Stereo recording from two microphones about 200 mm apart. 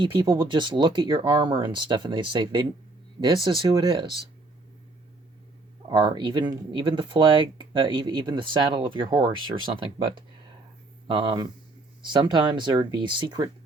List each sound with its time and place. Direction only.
0.0 s speech: 20° right (ahead or behind)
5.9 s speech: 25° right (ahead or behind)